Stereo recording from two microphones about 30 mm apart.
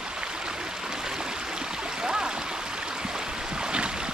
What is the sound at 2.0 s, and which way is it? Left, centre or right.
Stream, right.